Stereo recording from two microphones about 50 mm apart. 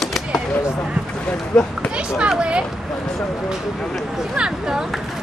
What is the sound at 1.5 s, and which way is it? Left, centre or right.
Speech, centre.